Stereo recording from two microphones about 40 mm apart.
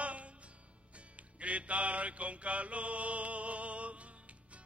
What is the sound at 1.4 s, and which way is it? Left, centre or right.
Mantra, right.